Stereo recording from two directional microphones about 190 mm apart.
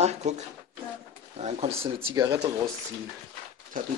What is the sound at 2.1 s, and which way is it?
Speech, 20° right (ahead or behind).